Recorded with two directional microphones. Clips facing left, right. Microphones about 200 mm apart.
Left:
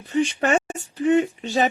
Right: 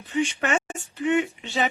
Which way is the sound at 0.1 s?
35° left (ahead or behind).